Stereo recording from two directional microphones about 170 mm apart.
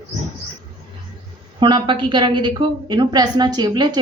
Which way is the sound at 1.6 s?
30° right (ahead or behind).